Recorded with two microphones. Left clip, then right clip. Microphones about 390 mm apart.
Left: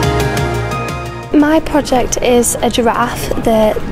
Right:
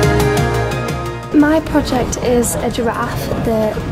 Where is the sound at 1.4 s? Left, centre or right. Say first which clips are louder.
Left 2 dB; left.